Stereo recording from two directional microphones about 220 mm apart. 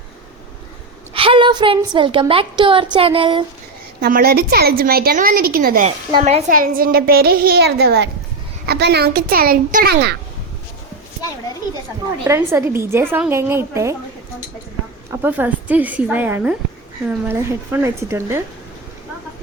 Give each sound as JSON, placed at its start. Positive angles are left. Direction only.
{"t": 1.1, "sound": "speech", "side_deg": -25}
{"t": 4.0, "sound": "a woman's voice", "side_deg": -45}
{"t": 6.1, "sound": "a woman's voice", "side_deg": -25}
{"t": 12.2, "sound": "a woman's voice", "side_deg": -10}
{"t": 15.1, "sound": "a woman's voice", "side_deg": -10}